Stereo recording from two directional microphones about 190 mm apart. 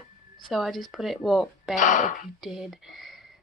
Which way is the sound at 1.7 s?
40° left (ahead or behind).